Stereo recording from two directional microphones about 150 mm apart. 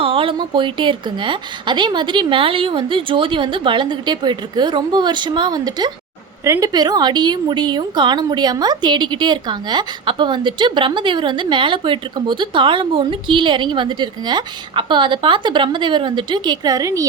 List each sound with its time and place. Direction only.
0.0 s a woman's voice: 35° right (ahead or behind)